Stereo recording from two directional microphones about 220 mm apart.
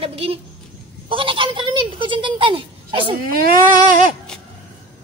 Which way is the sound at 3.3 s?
40° right (ahead or behind).